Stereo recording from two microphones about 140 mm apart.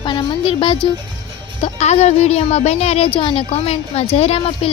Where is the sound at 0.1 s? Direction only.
35° left (ahead or behind).